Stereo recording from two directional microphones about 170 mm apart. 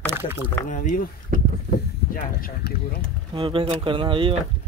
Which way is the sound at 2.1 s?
60° left (ahead or behind).